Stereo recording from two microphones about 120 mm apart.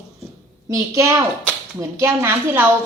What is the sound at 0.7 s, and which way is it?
A woman's voice, 25° right (ahead or behind).